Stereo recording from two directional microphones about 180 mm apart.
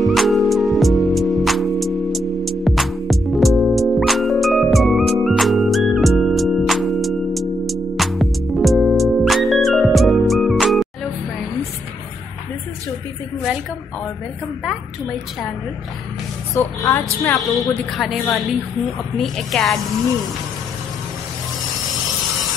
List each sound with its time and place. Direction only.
0.0 s music: centre (ahead or behind)
16.5 s a woman's voice: 15° left (ahead or behind)
17.9 s a woman's voice: centre (ahead or behind)